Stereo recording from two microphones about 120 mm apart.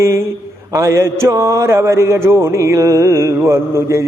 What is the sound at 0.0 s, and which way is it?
Mantra, 20° right (ahead or behind).